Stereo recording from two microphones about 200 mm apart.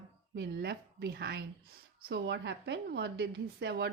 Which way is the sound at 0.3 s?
55° right (ahead or behind).